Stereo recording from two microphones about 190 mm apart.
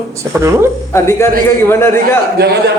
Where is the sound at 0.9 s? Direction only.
15° left (ahead or behind).